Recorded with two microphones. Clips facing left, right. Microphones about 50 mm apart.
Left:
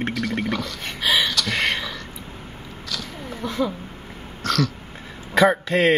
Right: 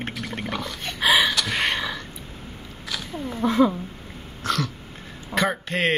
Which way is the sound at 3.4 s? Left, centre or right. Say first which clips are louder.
Right 6 dB; right.